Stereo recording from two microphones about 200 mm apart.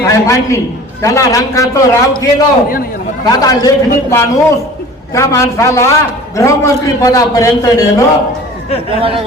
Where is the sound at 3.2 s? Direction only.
20° left (ahead or behind).